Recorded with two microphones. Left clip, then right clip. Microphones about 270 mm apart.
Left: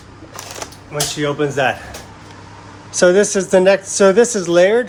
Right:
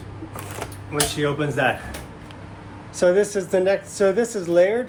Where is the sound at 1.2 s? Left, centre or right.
Left.